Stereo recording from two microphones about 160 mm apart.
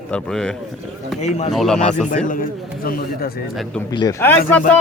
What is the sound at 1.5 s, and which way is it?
Speech, centre (ahead or behind).